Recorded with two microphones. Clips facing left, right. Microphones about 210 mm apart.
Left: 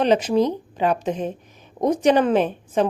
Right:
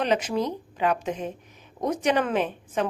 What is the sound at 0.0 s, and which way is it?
A woman's voice, 35° left (ahead or behind).